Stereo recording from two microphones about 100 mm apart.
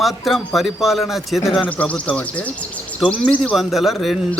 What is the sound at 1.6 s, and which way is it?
Speech, 15° left (ahead or behind).